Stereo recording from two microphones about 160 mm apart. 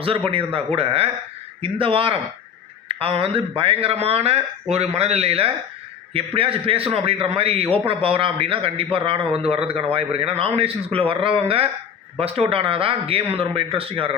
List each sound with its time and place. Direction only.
0.3 s a man's voice: 35° right (ahead or behind)